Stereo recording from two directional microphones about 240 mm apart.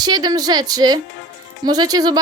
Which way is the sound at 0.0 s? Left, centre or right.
Centre.